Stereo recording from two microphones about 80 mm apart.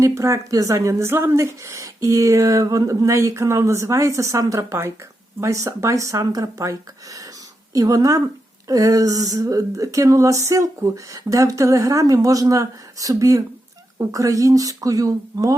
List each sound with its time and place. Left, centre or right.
0.0 s a woman's voice: right